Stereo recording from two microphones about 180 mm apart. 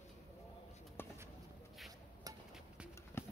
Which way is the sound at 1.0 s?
10° left (ahead or behind).